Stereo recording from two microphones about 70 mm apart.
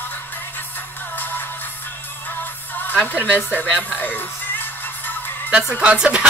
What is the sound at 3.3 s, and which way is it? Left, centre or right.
Speech, left.